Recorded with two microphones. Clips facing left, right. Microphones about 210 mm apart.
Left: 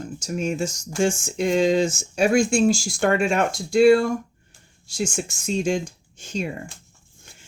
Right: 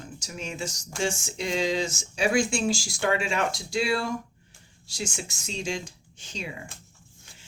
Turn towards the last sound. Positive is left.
turn(degrees=50)  # may be behind; listen again after turning